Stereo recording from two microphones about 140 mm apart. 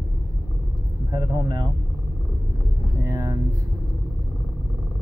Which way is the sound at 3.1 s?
25° right (ahead or behind).